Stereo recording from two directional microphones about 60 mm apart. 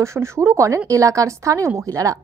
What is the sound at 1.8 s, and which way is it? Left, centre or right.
Speech, right.